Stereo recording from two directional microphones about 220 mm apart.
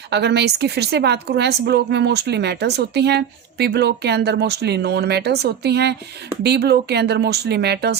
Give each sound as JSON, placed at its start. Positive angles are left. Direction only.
{"t": 0.1, "sound": "a woman's voice", "side_deg": -50}